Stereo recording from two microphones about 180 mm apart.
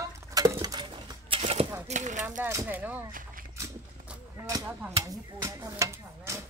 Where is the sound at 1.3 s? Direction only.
35° right (ahead or behind).